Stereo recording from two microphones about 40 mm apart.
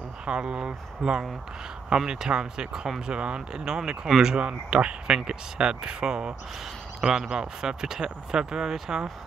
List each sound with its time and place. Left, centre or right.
0.2 s speech: right